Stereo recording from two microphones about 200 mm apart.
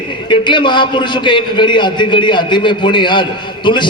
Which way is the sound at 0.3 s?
25° left (ahead or behind).